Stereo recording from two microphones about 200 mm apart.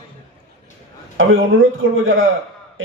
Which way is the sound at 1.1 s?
90° right.